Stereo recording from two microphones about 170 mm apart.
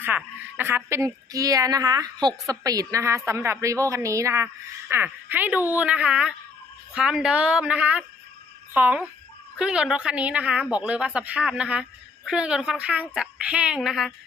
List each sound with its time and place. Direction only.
0.5 s a woman's voice: 10° right (ahead or behind)